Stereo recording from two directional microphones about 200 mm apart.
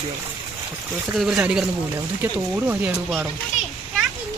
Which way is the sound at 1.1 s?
5° right (ahead or behind).